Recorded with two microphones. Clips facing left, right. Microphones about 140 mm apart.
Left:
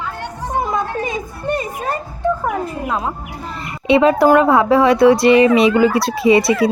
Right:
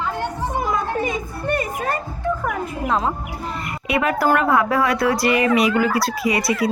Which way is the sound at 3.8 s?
25° left (ahead or behind).